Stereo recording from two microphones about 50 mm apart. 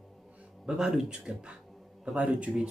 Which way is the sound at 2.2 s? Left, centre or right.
Right.